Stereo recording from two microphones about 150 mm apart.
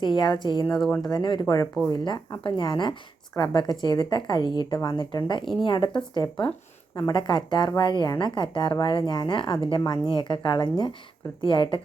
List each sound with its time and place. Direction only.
0.0 s a woman's voice: 30° left (ahead or behind)